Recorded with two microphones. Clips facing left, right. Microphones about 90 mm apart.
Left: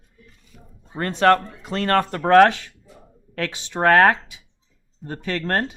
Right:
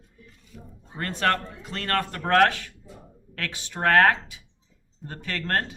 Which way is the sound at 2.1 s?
25° left (ahead or behind).